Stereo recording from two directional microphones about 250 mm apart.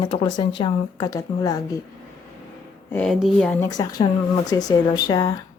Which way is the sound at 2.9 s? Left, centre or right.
Centre.